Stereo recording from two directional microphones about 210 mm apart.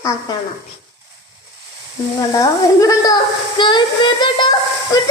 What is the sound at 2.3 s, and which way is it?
A child's voice, 15° left (ahead or behind).